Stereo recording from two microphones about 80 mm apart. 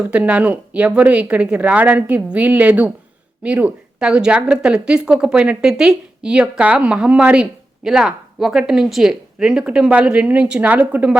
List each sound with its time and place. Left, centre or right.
0.1 s speech: centre